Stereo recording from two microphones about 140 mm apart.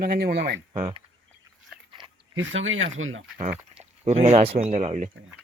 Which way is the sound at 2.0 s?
35° right (ahead or behind).